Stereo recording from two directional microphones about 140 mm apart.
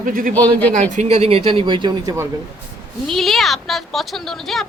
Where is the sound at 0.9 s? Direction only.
55° right (ahead or behind); by 2.3 s 25° right (ahead or behind).